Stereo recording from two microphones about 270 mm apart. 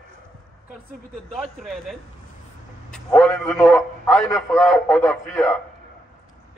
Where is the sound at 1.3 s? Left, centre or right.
Centre.